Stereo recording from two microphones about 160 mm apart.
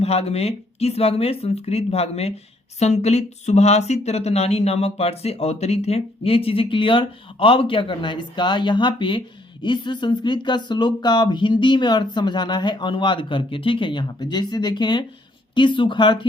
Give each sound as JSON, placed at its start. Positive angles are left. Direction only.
{"t": 0.0, "sound": "speech", "side_deg": 40}